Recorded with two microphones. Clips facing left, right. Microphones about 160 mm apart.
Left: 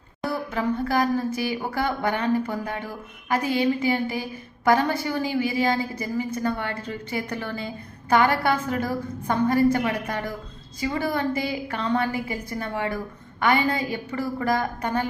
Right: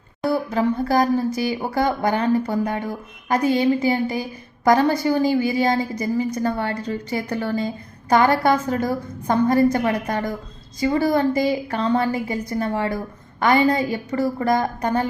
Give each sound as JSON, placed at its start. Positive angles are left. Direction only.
{"t": 0.3, "sound": "a woman's voice", "side_deg": -35}